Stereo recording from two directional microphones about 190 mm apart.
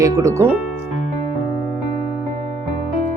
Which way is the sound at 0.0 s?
15° right (ahead or behind).